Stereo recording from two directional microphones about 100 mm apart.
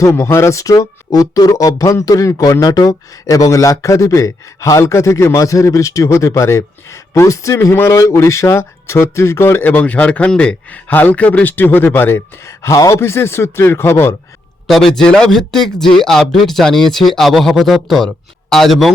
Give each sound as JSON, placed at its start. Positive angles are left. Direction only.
{"t": 0.0, "sound": "speech", "side_deg": 30}
{"t": 14.7, "sound": "speech", "side_deg": 5}